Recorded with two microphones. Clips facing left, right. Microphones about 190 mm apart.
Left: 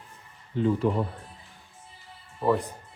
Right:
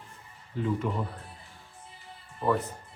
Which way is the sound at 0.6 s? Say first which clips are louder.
Left 6 dB; 25° left (ahead or behind).